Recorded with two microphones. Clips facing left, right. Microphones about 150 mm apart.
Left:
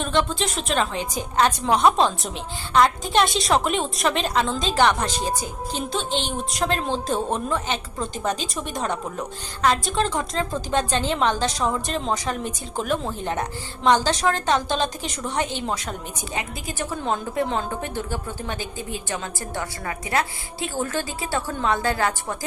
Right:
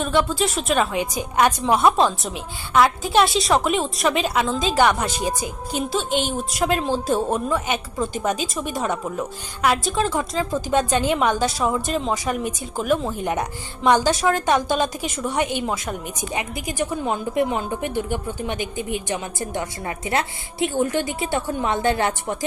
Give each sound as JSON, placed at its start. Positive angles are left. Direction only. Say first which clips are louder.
{"t": 0.0, "sound": "a woman's voice", "louder": "right 3 dB", "side_deg": -5}